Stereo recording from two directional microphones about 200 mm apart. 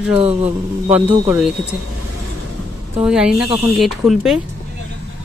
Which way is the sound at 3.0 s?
5° right (ahead or behind).